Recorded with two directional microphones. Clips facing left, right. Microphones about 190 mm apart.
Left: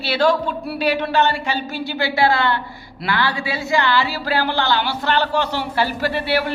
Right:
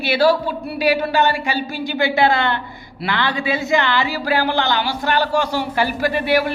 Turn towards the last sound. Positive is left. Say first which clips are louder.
# right 3 dB
turn(degrees=-15)  # may be behind; listen again after turning